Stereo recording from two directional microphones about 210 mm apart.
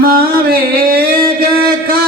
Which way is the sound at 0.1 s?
45° right (ahead or behind).